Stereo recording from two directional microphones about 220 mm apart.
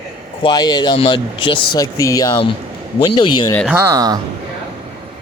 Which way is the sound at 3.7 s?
15° right (ahead or behind).